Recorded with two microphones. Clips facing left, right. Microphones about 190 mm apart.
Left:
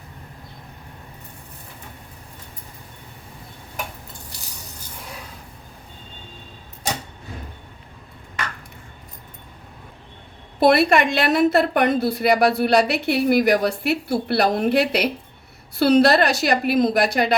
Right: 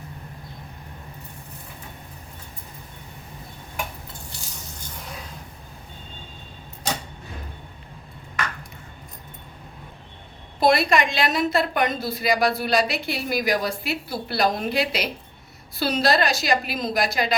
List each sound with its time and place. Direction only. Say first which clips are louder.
10.6 s a woman's voice: left 4 dB; 60° left (ahead or behind)